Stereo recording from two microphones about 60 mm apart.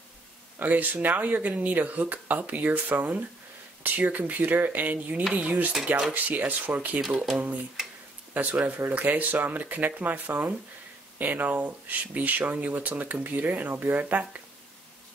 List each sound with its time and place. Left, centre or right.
0.6 s speech: right
8.3 s speech: right